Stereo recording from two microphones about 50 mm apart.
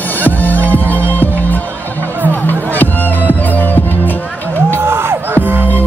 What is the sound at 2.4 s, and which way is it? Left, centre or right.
Music, left.